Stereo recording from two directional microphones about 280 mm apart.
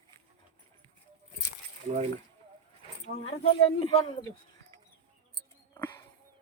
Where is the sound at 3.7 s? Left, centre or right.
Centre.